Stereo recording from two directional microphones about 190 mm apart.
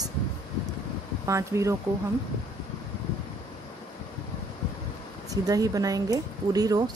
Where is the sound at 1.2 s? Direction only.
15° right (ahead or behind).